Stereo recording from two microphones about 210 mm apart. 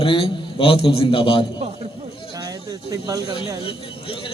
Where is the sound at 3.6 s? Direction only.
25° left (ahead or behind).